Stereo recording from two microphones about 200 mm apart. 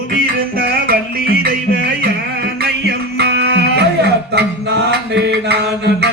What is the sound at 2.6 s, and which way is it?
Music, 55° right (ahead or behind).